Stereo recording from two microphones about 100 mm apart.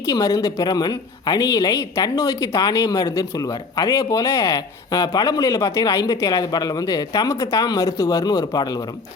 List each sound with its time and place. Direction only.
0.1 s a woman's voice: 40° left (ahead or behind)